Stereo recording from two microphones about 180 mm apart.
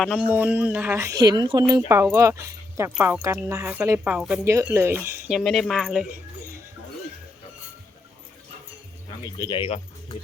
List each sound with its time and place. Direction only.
0.0 s speech: centre (ahead or behind)
0.3 s speech: 10° right (ahead or behind)
4.4 s speech: 15° right (ahead or behind)
5.3 s speech: centre (ahead or behind)
9.4 s speech: 30° left (ahead or behind)